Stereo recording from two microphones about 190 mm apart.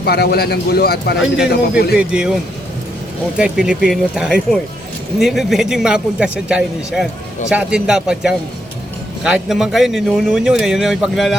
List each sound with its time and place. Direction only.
0.0 s speech: 55° left (ahead or behind)
2.0 s a man's voice: 5° right (ahead or behind)